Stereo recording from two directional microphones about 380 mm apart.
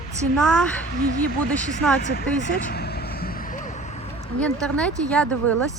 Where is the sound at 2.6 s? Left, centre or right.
Left.